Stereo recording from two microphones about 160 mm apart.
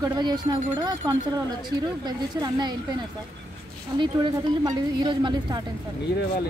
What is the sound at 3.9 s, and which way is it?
A woman's voice, 30° right (ahead or behind).